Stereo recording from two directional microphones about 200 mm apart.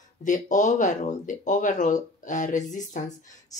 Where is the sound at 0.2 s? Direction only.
40° left (ahead or behind).